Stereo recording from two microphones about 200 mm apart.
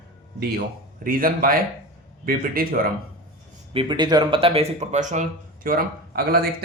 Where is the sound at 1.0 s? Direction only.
45° right (ahead or behind).